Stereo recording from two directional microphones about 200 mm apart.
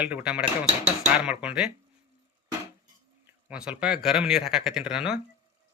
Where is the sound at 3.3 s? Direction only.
5° right (ahead or behind).